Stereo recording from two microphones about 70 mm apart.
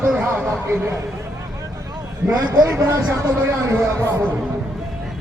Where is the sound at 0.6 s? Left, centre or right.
Right.